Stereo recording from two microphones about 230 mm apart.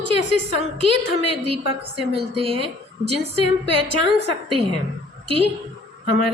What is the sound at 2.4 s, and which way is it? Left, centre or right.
A woman's voice, right.